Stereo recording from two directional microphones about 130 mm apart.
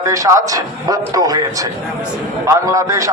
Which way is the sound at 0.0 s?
25° right (ahead or behind).